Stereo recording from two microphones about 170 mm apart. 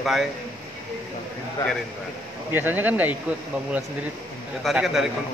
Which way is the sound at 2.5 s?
10° right (ahead or behind).